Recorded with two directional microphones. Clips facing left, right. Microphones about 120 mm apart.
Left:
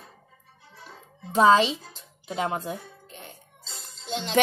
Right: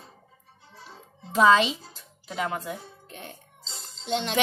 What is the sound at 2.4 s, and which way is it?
Speech, 30° left (ahead or behind).